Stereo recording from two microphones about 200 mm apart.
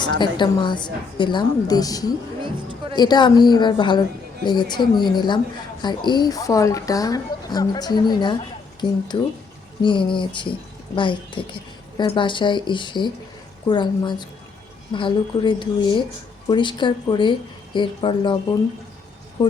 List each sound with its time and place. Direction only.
0.0 s speech: 20° left (ahead or behind)
2.4 s speech: 25° right (ahead or behind)
2.9 s speech: 20° left (ahead or behind)
9.8 s speech: 25° left (ahead or behind)